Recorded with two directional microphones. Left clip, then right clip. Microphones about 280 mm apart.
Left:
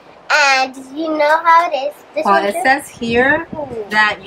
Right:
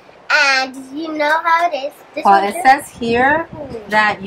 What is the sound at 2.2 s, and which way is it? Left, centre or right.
A woman's voice, centre.